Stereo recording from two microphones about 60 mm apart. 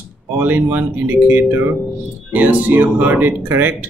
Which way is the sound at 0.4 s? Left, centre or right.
Right.